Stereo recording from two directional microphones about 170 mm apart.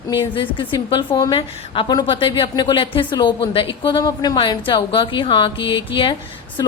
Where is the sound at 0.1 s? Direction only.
30° left (ahead or behind).